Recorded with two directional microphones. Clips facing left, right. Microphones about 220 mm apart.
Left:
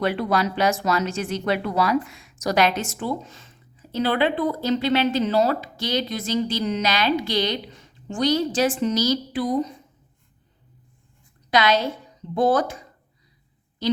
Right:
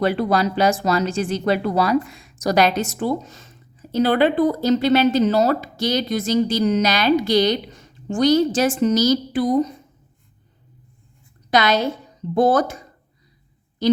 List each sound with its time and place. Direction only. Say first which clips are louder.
0.0 s a woman's voice: right 3 dB; 35° right (ahead or behind)
11.5 s a woman's voice: right 2 dB; 45° right (ahead or behind)